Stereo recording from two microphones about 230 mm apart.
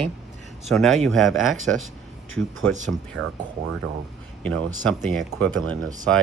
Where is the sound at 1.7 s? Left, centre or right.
Right.